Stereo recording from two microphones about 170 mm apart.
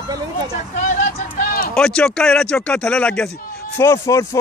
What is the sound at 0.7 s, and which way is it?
Speech, 45° left (ahead or behind).